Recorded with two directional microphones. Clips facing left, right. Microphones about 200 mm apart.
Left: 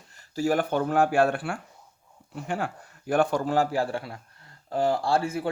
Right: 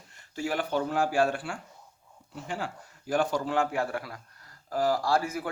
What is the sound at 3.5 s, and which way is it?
Speech, 35° left (ahead or behind).